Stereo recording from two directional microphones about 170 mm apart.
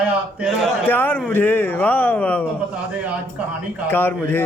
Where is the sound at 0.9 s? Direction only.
10° left (ahead or behind).